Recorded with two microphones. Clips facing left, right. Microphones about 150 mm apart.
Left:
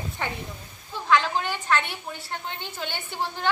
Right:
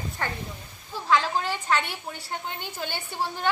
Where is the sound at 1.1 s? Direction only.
10° right (ahead or behind).